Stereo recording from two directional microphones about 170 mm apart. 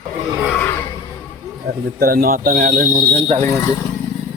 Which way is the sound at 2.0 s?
55° right (ahead or behind).